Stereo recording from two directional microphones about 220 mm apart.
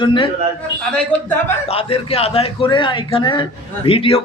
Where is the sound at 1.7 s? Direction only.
25° left (ahead or behind).